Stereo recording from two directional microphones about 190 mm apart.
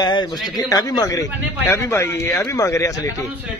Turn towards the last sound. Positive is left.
turn(degrees=15)  # may be behind; listen again after turning